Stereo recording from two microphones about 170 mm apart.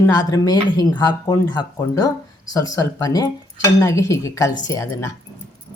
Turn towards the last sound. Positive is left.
turn(degrees=15)  # may be behind; listen again after turning